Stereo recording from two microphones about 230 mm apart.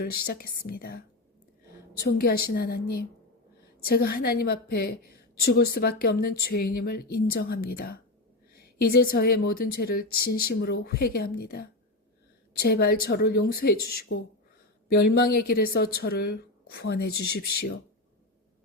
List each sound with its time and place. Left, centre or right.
0.0 s a woman's voice: left